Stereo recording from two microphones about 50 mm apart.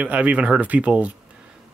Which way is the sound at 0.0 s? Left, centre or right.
Right.